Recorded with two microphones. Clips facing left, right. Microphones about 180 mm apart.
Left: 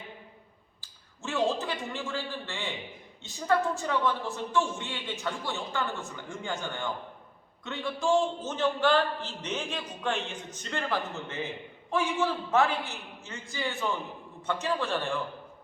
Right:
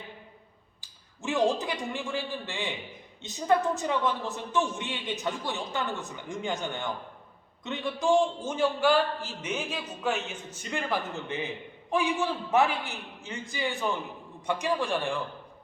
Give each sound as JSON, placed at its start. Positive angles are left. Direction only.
{"t": 0.8, "sound": "a man's voice", "side_deg": -15}